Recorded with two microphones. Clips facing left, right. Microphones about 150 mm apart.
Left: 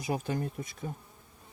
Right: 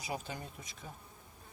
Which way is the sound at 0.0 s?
50° left (ahead or behind).